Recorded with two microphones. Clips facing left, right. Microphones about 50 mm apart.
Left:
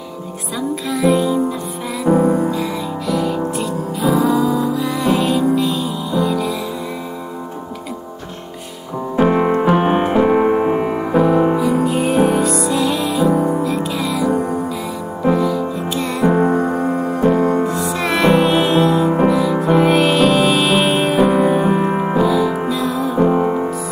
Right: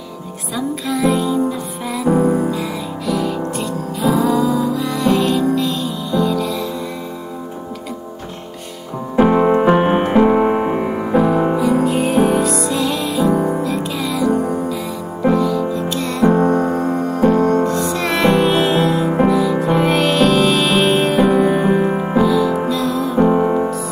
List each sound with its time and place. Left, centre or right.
0.6 s music: centre
9.1 s music: centre
21.8 s music: centre
22.1 s music: centre